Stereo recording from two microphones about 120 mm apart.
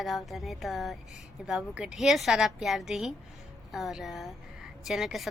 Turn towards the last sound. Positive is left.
turn(degrees=0)  # may be behind; listen again after turning